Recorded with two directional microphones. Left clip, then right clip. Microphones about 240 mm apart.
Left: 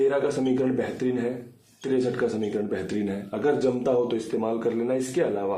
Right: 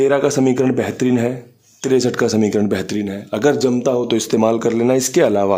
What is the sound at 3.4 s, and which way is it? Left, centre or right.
Speech, right.